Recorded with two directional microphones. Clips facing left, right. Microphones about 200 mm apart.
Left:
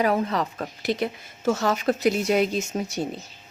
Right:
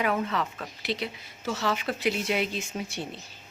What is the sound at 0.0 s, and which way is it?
A woman's voice, 35° left (ahead or behind).